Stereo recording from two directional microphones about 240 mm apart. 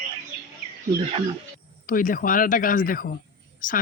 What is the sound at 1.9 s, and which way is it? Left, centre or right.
Speech, left.